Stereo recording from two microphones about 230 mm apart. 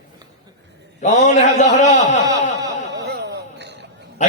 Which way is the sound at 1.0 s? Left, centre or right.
Left.